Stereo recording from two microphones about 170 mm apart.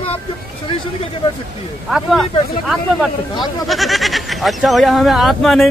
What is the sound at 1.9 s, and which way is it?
Speech, centre (ahead or behind).